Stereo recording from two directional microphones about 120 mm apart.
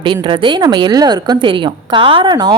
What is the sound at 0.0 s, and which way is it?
A woman's voice, 45° right (ahead or behind).